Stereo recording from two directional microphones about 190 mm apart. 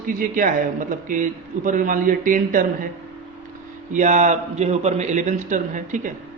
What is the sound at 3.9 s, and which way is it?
A man's voice, 40° right (ahead or behind).